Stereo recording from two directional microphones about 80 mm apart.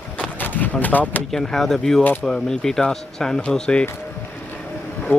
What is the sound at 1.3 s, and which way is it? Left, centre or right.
Speech, centre.